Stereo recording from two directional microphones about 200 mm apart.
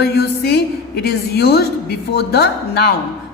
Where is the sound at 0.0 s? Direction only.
55° left (ahead or behind).